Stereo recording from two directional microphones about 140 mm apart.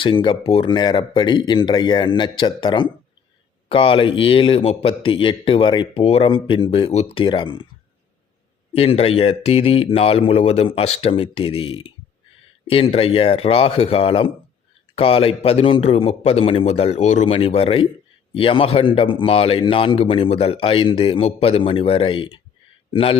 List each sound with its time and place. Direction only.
0.0 s speech: 35° left (ahead or behind)
8.7 s speech: 45° left (ahead or behind)
17.3 s a man's voice: 40° left (ahead or behind)